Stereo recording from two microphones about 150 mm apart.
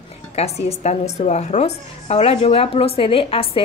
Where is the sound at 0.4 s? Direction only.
45° left (ahead or behind).